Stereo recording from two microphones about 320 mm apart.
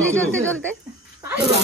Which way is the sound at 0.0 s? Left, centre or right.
Centre.